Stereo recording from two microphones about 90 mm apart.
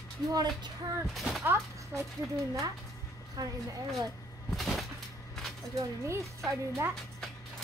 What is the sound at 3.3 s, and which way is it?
Speech, 45° right (ahead or behind).